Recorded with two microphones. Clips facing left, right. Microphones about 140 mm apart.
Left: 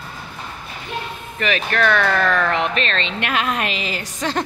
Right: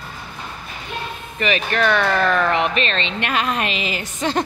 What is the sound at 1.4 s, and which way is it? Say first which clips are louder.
Speech: even; 5° right (ahead or behind).